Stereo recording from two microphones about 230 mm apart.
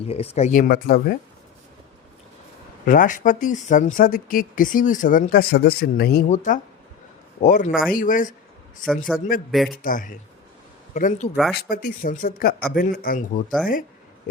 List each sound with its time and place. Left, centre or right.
0.1 s speech: left
2.8 s speech: left
9.1 s speech: centre
9.8 s speech: left